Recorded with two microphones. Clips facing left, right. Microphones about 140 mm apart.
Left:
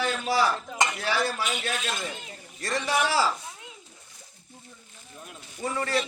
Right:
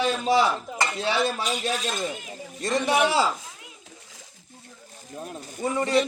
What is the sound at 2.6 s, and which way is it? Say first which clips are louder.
Speech: right 4 dB; 20° right (ahead or behind).